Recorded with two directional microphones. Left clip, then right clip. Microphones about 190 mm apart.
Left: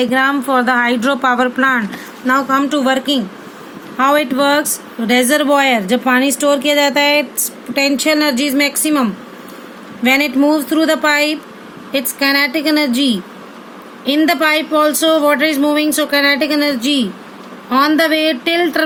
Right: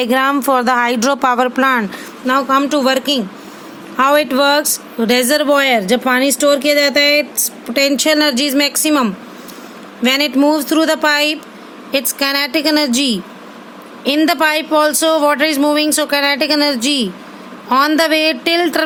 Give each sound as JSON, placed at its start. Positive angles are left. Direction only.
{"t": 0.0, "sound": "speech", "side_deg": -50}
{"t": 2.2, "sound": "speech", "side_deg": -30}